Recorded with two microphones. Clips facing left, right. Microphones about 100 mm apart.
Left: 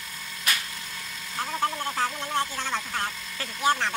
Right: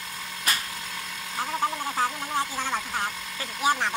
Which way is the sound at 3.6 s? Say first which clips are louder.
Even; 10° right (ahead or behind).